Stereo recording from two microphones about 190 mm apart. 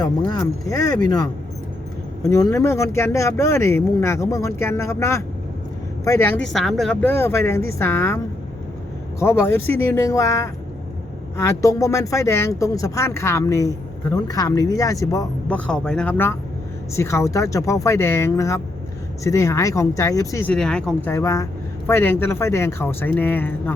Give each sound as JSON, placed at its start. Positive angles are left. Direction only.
{"t": 0.0, "sound": "speech", "side_deg": 20}
{"t": 15.4, "sound": "speech", "side_deg": 5}